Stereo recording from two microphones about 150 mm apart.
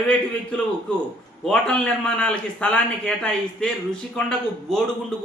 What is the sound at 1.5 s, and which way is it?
Speech, 5° left (ahead or behind).